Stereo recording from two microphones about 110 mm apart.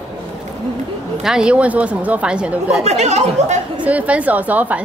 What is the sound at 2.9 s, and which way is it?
Speech, 90° right.